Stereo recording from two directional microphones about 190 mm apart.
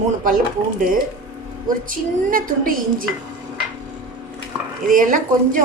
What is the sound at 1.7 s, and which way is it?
A woman's voice, 45° right (ahead or behind).